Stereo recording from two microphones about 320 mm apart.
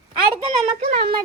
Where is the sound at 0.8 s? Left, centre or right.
Centre.